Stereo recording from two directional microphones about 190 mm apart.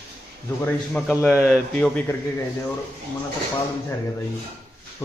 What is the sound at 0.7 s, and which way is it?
Speech, 5° left (ahead or behind).